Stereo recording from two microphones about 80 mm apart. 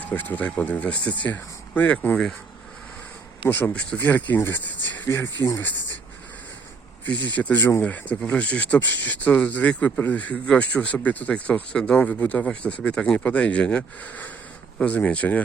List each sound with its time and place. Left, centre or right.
0.0 s speech: left
3.5 s speech: centre
7.0 s speech: centre